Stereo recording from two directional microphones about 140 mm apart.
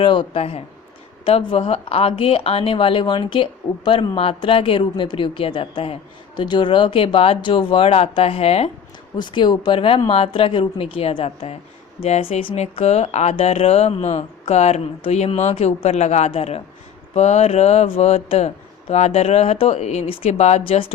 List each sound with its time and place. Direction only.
0.0 s speech: 35° left (ahead or behind)
9.1 s speech: 35° left (ahead or behind)